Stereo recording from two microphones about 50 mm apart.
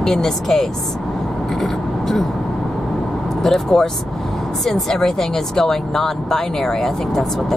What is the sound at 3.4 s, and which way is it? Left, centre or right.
Speech, centre.